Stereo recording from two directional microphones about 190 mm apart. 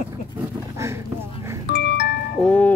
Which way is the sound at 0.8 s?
15° right (ahead or behind).